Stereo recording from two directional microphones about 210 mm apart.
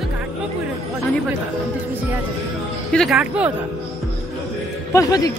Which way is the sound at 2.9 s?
Centre (ahead or behind).